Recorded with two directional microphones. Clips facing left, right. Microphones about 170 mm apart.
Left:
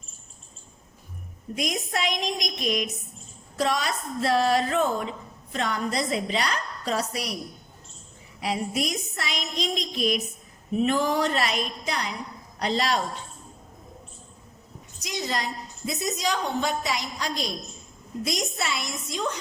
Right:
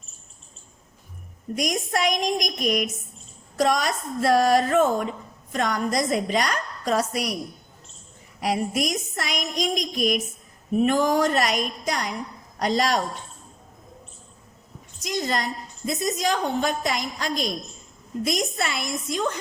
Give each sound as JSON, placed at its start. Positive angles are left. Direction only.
{"t": 1.5, "sound": "a woman's voice", "side_deg": -45}
{"t": 8.4, "sound": "a woman's voice", "side_deg": -45}
{"t": 15.0, "sound": "a woman's voice", "side_deg": -50}